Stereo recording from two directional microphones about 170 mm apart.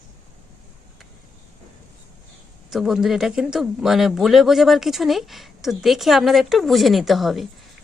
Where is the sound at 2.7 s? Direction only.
Centre (ahead or behind).